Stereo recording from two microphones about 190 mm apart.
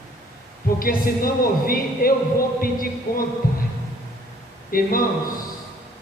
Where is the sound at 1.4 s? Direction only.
50° left (ahead or behind).